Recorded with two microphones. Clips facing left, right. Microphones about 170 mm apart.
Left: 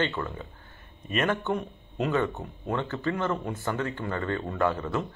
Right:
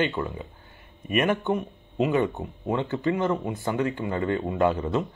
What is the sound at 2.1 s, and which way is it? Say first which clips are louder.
Speech: right 3 dB; 15° right (ahead or behind).